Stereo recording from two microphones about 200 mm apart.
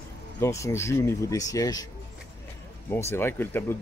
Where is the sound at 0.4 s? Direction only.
15° left (ahead or behind).